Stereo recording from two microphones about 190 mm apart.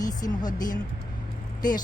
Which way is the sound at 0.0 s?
20° left (ahead or behind).